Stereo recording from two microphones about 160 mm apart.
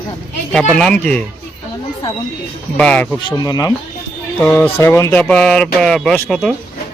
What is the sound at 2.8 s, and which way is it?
Speech, 5° left (ahead or behind).